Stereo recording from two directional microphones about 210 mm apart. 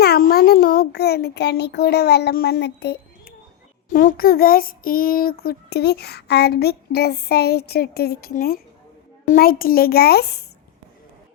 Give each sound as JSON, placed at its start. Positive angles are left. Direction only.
{"t": 0.0, "sound": "a child's voice", "side_deg": 45}
{"t": 3.8, "sound": "child singing", "side_deg": 40}